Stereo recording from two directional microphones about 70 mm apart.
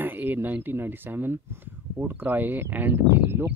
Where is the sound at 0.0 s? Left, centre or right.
Right.